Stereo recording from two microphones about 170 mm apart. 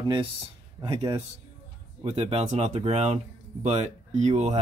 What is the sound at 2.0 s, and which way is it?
Speech, 35° right (ahead or behind).